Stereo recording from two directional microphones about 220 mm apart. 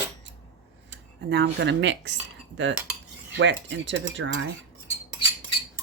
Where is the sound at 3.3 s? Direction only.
55° right (ahead or behind).